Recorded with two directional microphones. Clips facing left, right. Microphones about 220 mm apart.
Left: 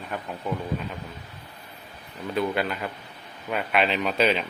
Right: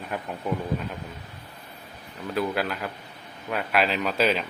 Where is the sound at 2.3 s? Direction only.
Centre (ahead or behind).